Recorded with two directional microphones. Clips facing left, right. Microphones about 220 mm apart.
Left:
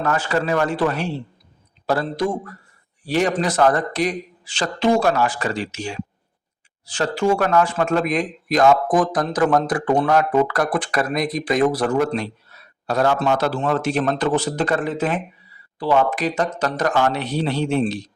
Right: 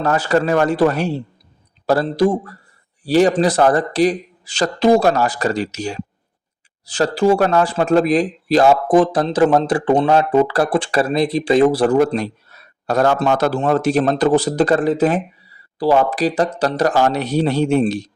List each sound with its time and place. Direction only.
0.0 s speech: 35° right (ahead or behind)